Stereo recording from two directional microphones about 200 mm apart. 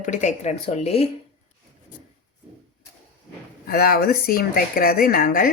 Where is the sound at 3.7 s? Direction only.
50° left (ahead or behind).